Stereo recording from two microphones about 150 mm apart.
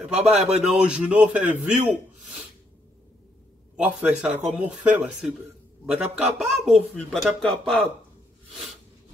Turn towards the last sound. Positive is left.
turn(degrees=5)  # may be behind; listen again after turning